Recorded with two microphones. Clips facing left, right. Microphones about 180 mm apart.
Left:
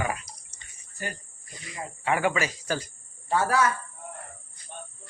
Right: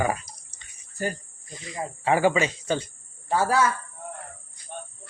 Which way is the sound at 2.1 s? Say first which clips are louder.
Right 4 dB; 30° right (ahead or behind).